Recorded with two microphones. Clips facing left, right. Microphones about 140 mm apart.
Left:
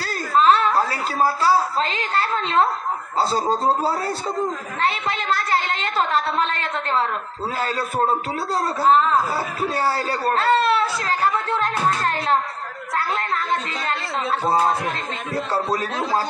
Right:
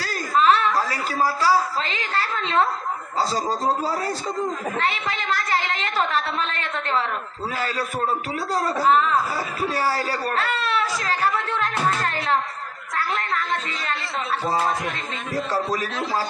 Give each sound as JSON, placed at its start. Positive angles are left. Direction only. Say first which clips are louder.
{"t": 0.4, "sound": "a sound", "louder": "left 2 dB", "side_deg": 35}
{"t": 1.9, "sound": "a man's voice", "louder": "left 3 dB", "side_deg": 35}
{"t": 14.5, "sound": "a man's voice", "louder": "left 4 dB", "side_deg": 30}